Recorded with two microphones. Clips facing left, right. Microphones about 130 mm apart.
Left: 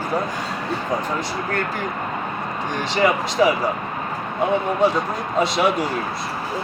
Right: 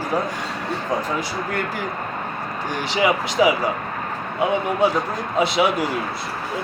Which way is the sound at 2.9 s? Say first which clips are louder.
Even; 10° right (ahead or behind).